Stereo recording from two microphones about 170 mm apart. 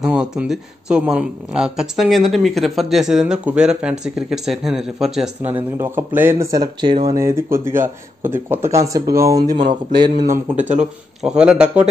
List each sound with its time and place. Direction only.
0.0 s speech: 5° right (ahead or behind)
5.8 s speech: 15° right (ahead or behind)
9.6 s speech: 50° right (ahead or behind)
9.9 s speech: 25° right (ahead or behind)
10.3 s speech: 45° right (ahead or behind)
11.2 s speech: 5° right (ahead or behind)